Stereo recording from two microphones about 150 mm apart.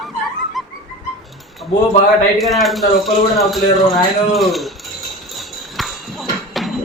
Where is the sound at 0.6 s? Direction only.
Centre (ahead or behind).